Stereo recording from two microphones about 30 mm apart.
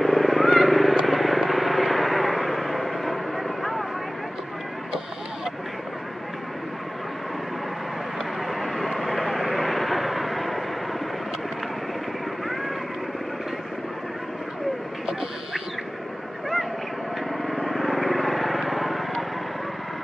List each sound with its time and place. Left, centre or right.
0.0 s vehicle: centre
8.5 s vehicle: centre
17.5 s vehicle: centre